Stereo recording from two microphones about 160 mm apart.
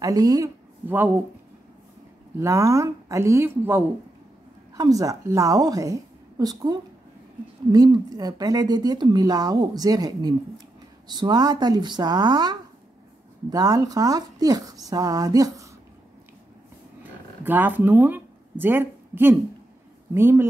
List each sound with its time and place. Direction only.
0.0 s speech: 20° right (ahead or behind)
2.4 s a woman's voice: 20° right (ahead or behind)
17.0 s a sound: 10° right (ahead or behind)
20.2 s speech: 15° right (ahead or behind)